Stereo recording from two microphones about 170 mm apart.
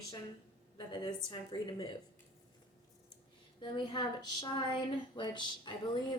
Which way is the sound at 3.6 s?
25° left (ahead or behind).